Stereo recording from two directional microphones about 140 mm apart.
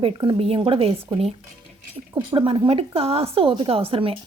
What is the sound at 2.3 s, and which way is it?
A woman's voice, 35° right (ahead or behind).